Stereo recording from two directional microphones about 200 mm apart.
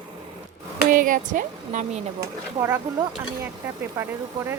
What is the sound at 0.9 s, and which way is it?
Speech, 40° right (ahead or behind).